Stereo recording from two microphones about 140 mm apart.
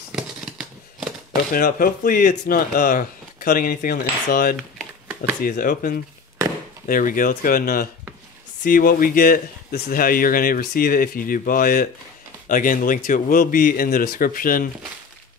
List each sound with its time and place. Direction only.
0.1 s scissors: 5° right (ahead or behind)
1.5 s speech: 90° left